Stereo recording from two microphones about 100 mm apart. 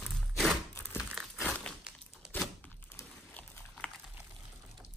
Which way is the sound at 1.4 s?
10° left (ahead or behind).